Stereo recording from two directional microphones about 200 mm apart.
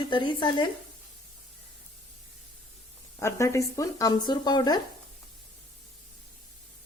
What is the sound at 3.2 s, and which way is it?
A woman's voice, 15° left (ahead or behind).